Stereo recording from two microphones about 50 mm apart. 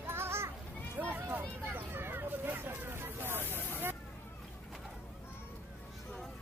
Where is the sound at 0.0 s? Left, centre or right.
Right.